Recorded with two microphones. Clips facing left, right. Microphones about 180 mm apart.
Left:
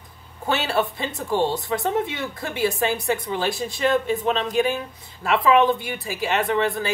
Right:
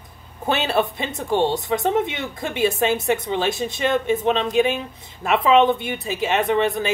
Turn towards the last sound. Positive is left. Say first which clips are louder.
# right 2 dB
turn(degrees=-20)  # may be behind; listen again after turning